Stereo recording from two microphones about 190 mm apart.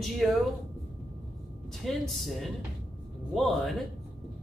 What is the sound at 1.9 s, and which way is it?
A woman's voice, centre (ahead or behind).